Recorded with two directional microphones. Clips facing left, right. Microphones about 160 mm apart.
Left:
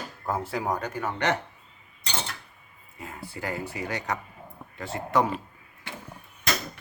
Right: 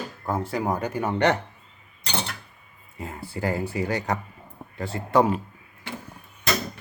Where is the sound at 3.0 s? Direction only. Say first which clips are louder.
Right 6 dB; 30° right (ahead or behind).